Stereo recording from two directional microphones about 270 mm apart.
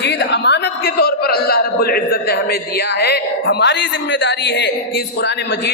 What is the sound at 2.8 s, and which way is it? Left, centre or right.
Speech, left.